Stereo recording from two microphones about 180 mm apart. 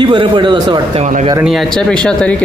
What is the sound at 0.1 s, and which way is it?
Speech, 25° right (ahead or behind).